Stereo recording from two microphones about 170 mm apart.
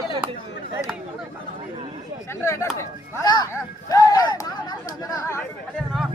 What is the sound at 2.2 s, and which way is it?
Speech, 15° left (ahead or behind).